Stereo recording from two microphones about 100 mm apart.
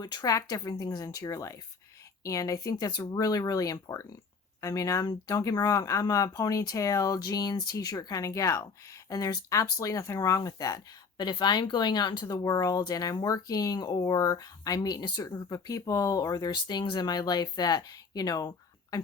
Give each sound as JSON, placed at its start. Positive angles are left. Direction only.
{"t": 0.0, "sound": "speech", "side_deg": 45}
{"t": 11.2, "sound": "speech", "side_deg": 45}